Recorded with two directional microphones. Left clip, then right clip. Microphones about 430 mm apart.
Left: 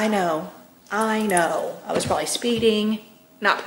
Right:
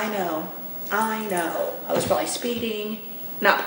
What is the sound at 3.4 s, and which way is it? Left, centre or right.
Speech, left.